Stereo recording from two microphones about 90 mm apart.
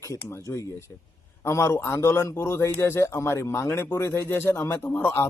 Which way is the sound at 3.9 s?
30° left (ahead or behind).